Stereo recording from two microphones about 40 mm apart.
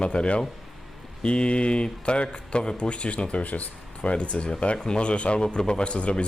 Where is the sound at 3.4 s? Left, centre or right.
Left.